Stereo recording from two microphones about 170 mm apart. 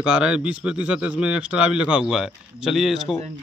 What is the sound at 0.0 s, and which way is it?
A man's voice, 5° right (ahead or behind).